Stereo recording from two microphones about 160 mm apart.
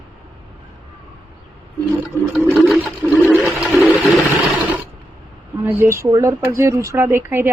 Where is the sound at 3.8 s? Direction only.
10° right (ahead or behind).